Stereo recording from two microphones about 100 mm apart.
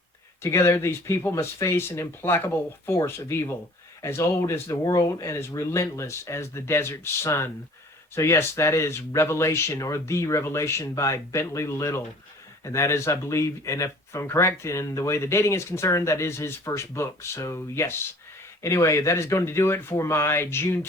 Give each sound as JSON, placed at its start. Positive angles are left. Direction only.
{"t": 0.4, "sound": "speech", "side_deg": 30}